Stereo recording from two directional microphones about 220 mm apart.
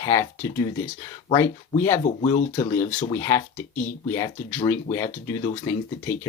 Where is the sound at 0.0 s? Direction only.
15° left (ahead or behind).